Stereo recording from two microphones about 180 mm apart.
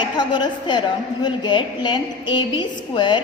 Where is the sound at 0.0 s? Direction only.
25° left (ahead or behind).